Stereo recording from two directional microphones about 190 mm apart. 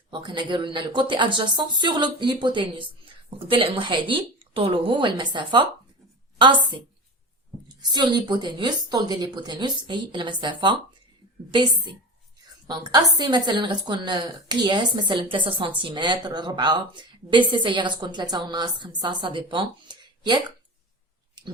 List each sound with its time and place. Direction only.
0.1 s a woman's voice: 25° right (ahead or behind)
21.4 s clicking: 20° right (ahead or behind)